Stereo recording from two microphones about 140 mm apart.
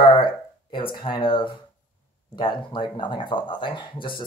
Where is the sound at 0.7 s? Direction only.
35° left (ahead or behind).